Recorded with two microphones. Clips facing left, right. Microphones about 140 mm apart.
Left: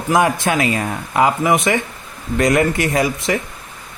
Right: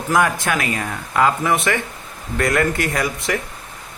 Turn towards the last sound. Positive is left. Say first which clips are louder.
# left 4 dB
turn(degrees=25)  # may be behind; listen again after turning